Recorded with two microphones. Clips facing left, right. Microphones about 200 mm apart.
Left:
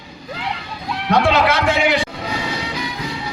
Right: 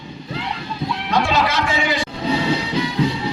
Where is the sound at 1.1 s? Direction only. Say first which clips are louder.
Left 4 dB; 65° left (ahead or behind).